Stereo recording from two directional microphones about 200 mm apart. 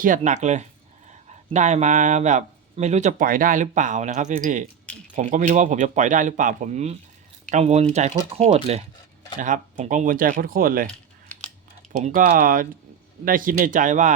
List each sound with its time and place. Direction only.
0.0 s speech: 40° right (ahead or behind)
11.9 s speech: 40° right (ahead or behind)